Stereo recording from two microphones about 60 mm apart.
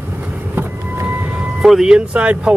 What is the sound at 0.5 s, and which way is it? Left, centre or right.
Vehicle, right.